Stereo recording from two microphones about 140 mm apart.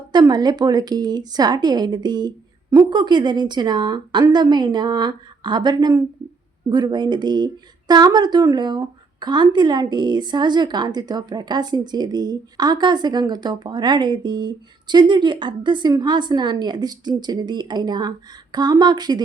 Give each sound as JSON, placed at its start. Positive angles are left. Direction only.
{"t": 0.1, "sound": "speech", "side_deg": -30}